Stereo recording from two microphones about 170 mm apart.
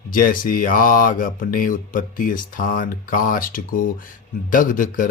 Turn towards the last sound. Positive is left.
turn(degrees=55)  # may be behind; listen again after turning